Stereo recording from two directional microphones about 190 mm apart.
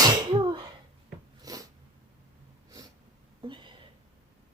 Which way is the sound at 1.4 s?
20° right (ahead or behind).